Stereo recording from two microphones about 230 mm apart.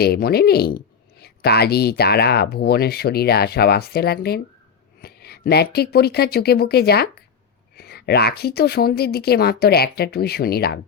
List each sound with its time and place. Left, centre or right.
0.0 s speech: left